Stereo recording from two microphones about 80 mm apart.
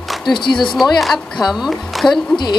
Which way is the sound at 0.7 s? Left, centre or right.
Centre.